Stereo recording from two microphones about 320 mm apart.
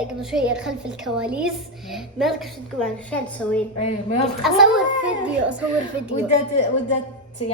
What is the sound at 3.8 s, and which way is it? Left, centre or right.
Speech, left.